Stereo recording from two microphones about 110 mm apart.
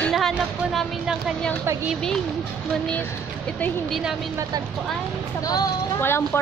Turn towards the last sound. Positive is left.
turn(degrees=20)  # may be behind; listen again after turning